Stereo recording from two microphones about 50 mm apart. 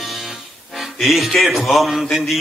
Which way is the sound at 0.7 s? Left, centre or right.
Centre.